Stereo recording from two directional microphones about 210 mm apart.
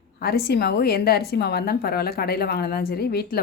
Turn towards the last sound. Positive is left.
turn(degrees=45)  # may be behind; listen again after turning